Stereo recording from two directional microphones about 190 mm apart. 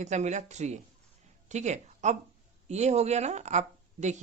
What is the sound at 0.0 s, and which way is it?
A woman's voice, 35° right (ahead or behind).